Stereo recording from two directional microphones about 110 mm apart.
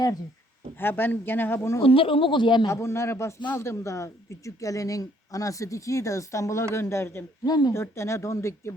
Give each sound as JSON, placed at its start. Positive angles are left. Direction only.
{"t": 0.8, "sound": "speech", "side_deg": 20}
{"t": 1.8, "sound": "speech", "side_deg": 55}
{"t": 2.6, "sound": "speech", "side_deg": 25}
{"t": 7.4, "sound": "speech", "side_deg": 35}
{"t": 7.7, "sound": "speech", "side_deg": 25}